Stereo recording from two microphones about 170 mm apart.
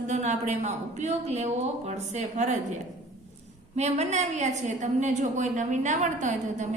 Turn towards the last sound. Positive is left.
turn(degrees=-45)  # may be behind; listen again after turning